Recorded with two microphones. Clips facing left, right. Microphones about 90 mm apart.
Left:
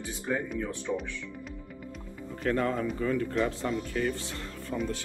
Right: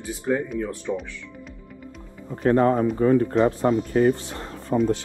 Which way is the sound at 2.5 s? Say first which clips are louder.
Right 10 dB; 30° right (ahead or behind).